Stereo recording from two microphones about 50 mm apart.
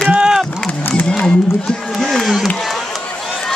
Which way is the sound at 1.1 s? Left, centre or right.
Centre.